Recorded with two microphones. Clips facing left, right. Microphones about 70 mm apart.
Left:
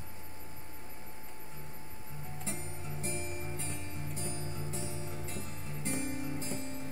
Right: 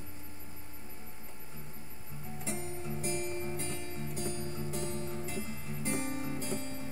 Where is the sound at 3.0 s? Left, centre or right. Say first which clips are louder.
Right 4 dB; right.